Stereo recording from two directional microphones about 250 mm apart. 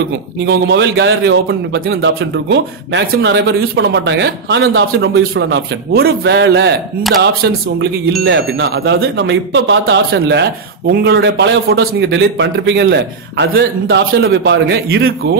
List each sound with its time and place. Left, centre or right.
0.5 s a man's voice: right